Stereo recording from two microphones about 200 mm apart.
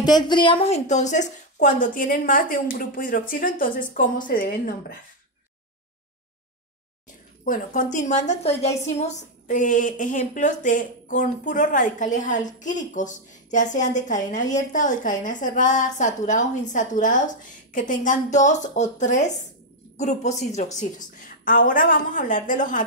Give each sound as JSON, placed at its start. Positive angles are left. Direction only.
{"t": 0.0, "sound": "a woman's voice", "side_deg": 20}
{"t": 7.4, "sound": "a woman's voice", "side_deg": 40}